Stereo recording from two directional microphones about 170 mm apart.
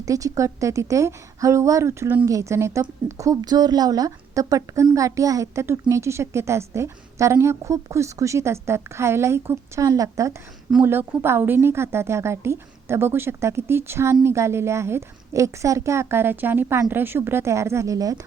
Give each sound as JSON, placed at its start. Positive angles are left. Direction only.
{"t": 0.0, "sound": "a woman's voice", "side_deg": -20}